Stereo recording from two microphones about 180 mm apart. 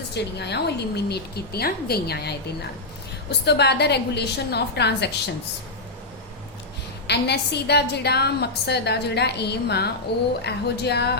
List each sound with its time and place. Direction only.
0.1 s a woman's voice: 70° left (ahead or behind)
3.4 s a woman's voice: 65° left (ahead or behind)
7.1 s a woman's voice: 65° left (ahead or behind)